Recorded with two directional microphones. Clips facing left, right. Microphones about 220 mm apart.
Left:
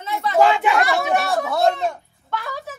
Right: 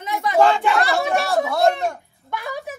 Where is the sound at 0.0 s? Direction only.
15° right (ahead or behind).